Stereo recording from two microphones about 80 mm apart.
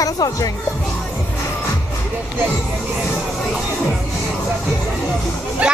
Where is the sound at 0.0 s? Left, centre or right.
Left.